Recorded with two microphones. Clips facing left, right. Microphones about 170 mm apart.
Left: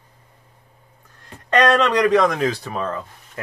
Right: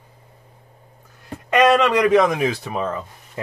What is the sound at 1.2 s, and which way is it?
Speech, 5° right (ahead or behind).